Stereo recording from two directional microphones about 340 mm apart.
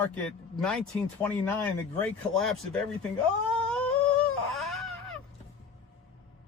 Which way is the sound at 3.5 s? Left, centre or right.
Centre.